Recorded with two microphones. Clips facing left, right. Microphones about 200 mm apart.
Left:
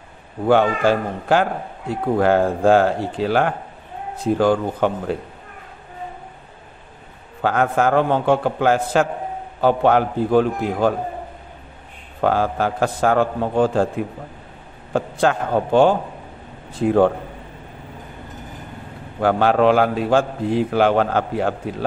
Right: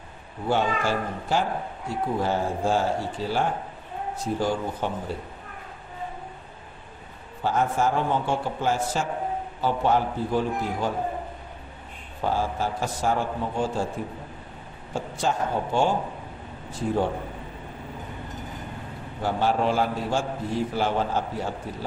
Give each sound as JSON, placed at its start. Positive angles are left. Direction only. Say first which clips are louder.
{"t": 0.5, "sound": "a man's voice", "louder": "left 8 dB", "side_deg": 60}
{"t": 7.4, "sound": "a man's voice", "louder": "left 6 dB", "side_deg": 60}
{"t": 12.2, "sound": "a man's voice", "louder": "left 7 dB", "side_deg": 65}
{"t": 14.9, "sound": "a man's voice", "louder": "left 8 dB", "side_deg": 60}
{"t": 19.1, "sound": "a man's voice", "louder": "left 8 dB", "side_deg": 60}